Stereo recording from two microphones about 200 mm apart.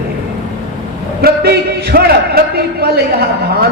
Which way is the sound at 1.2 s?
50° right (ahead or behind).